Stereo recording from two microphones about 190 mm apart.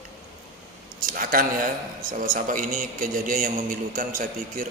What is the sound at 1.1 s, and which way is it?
Speech, 50° right (ahead or behind).